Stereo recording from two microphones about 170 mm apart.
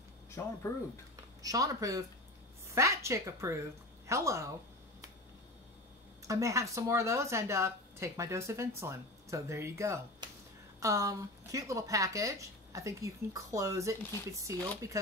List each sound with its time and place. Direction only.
0.3 s speech: 15° left (ahead or behind)
1.4 s a woman's voice: 20° right (ahead or behind)
6.2 s a woman's voice: 20° right (ahead or behind)